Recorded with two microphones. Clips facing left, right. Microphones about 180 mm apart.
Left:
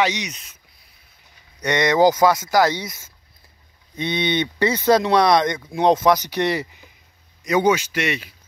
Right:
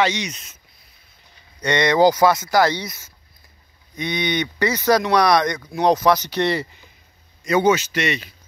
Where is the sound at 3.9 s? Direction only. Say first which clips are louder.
Left 1 dB; 25° left (ahead or behind); by 8.3 s 10° left (ahead or behind).